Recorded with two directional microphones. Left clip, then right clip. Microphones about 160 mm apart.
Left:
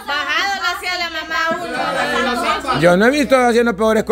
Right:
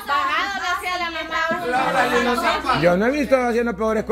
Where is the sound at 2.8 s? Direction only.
40° left (ahead or behind).